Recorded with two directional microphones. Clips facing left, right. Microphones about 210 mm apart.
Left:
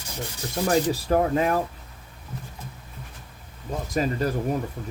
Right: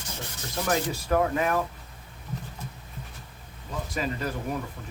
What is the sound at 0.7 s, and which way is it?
Speech, 35° left (ahead or behind).